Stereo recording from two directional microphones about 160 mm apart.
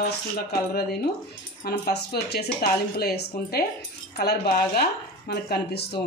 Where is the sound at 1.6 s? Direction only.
80° left.